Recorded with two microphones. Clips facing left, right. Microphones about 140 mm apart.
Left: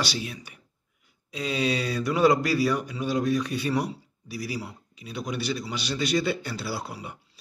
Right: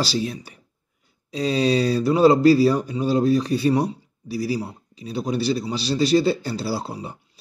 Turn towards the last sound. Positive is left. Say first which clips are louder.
# right 6 dB
turn(degrees=-30)  # may be behind; listen again after turning